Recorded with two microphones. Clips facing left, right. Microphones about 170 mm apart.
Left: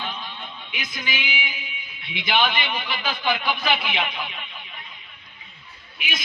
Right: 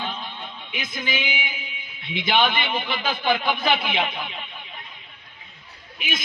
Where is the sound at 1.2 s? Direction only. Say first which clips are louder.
Right 1 dB; 50° right (ahead or behind).